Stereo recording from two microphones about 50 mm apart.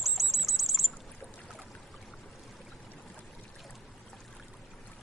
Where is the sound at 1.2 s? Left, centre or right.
Right.